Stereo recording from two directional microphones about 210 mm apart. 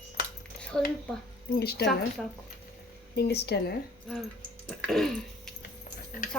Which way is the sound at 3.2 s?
50° left (ahead or behind).